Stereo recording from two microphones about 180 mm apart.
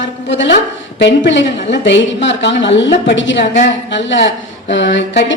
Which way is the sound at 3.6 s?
90° left.